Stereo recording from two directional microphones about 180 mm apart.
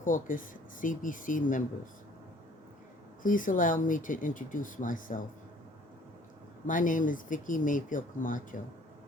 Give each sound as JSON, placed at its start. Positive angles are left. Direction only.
{"t": 0.0, "sound": "speech", "side_deg": 50}
{"t": 3.2, "sound": "speech", "side_deg": 45}
{"t": 6.7, "sound": "speech", "side_deg": 45}